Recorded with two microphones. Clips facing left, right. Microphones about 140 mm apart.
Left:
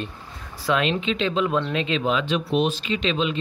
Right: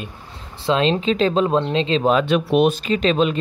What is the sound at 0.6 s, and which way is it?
Speech, 30° right (ahead or behind).